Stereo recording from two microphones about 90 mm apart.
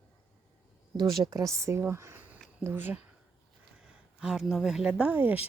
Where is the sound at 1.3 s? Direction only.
35° right (ahead or behind).